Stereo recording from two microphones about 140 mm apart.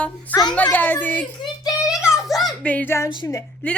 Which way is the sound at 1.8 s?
5° right (ahead or behind).